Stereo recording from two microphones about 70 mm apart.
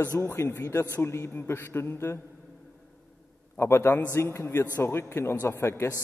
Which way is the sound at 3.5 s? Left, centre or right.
Left.